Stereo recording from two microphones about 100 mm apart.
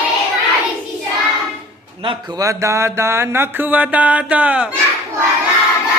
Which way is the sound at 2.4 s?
30° right (ahead or behind).